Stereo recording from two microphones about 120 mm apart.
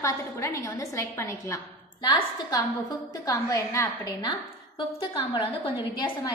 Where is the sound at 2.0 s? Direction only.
40° left (ahead or behind).